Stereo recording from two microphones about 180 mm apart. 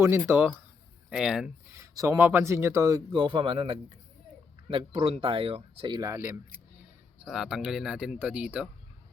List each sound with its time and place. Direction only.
0.0 s speech: 15° right (ahead or behind)
1.8 s speech: 15° right (ahead or behind)
7.3 s speech: centre (ahead or behind)